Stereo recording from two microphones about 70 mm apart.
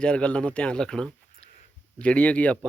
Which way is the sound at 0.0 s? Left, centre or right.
Centre.